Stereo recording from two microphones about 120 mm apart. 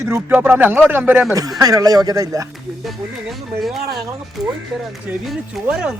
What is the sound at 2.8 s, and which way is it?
Speech, centre (ahead or behind).